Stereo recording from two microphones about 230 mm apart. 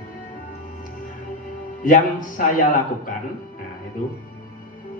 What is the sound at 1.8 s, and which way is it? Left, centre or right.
Speech, left.